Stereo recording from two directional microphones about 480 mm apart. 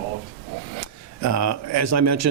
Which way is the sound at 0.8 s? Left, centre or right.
Right.